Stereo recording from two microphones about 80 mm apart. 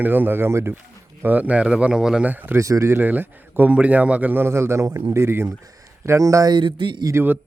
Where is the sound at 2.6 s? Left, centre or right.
Right.